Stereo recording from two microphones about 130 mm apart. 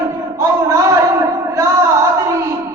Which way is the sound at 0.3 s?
25° right (ahead or behind).